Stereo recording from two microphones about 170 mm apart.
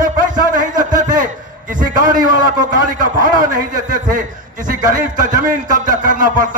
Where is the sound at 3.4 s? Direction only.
50° right (ahead or behind).